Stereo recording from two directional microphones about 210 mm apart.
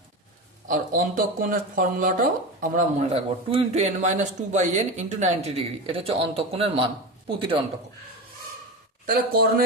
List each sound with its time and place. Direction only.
0.7 s speech: 40° right (ahead or behind); by 7.6 s 25° right (ahead or behind)
9.0 s speech: 45° right (ahead or behind)